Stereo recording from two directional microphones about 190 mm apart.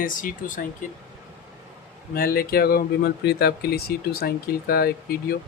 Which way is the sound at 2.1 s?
50° left (ahead or behind).